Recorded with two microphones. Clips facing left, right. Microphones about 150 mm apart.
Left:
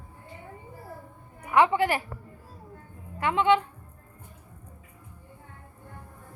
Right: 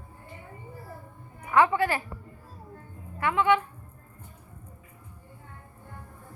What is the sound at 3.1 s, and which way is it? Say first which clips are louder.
Speech: left 1 dB; 20° left (ahead or behind).